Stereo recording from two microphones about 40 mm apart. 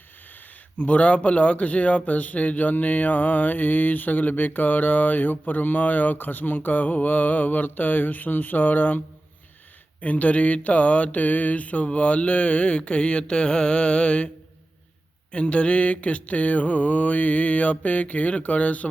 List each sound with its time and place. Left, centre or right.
0.8 s a man's voice: left
10.0 s mantra: left
15.3 s mantra: left